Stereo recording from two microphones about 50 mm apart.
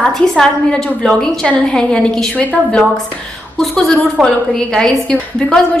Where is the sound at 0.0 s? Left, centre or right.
Centre.